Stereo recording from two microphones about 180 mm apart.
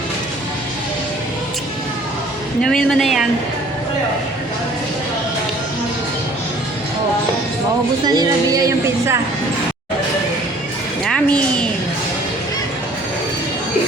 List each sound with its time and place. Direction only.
2.6 s speech: 5° left (ahead or behind)
8.0 s a woman's voice: 20° right (ahead or behind)
11.0 s a sound: 5° left (ahead or behind)